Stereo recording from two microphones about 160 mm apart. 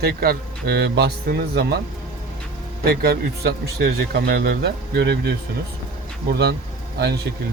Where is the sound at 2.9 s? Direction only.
70° right (ahead or behind); by 6.5 s 90° right.